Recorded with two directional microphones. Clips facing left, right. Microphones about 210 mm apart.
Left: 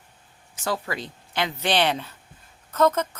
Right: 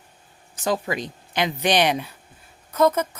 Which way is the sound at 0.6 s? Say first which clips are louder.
Right 4 dB; 15° right (ahead or behind).